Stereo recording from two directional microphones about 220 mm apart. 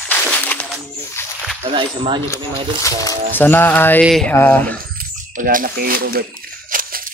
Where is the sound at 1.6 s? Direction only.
25° right (ahead or behind).